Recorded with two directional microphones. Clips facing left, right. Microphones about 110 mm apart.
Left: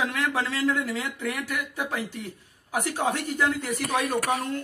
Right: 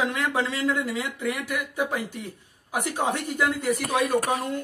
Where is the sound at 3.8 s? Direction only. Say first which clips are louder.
Right 1 dB; 40° right (ahead or behind).